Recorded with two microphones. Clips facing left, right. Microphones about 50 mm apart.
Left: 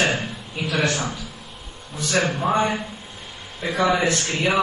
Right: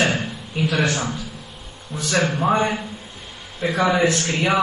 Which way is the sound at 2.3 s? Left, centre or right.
Centre.